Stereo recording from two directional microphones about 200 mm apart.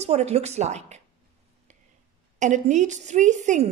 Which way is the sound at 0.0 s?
35° right (ahead or behind).